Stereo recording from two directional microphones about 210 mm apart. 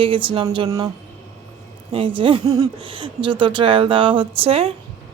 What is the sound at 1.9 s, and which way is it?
A woman's voice, 25° right (ahead or behind).